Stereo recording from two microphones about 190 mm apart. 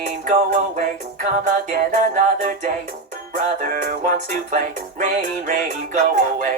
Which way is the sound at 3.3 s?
45° right (ahead or behind).